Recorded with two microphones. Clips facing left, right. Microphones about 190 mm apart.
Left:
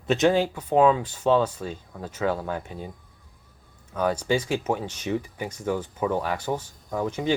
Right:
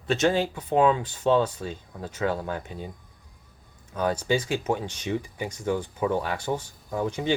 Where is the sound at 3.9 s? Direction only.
10° left (ahead or behind).